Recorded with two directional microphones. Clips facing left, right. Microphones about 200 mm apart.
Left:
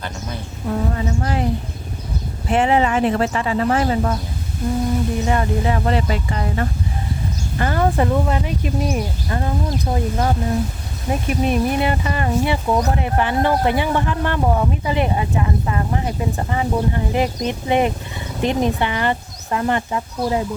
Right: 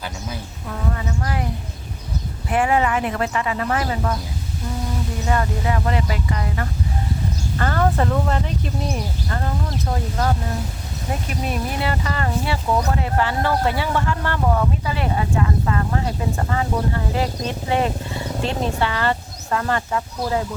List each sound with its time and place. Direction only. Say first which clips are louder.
0.7 s speech: left 5 dB; 25° left (ahead or behind)
2.5 s speech: left 3 dB; 25° left (ahead or behind)
5.2 s speech: left 3 dB; 20° left (ahead or behind)
7.6 s speech: left 2 dB; 15° left (ahead or behind)